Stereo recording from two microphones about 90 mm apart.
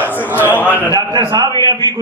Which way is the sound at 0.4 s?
20° left (ahead or behind).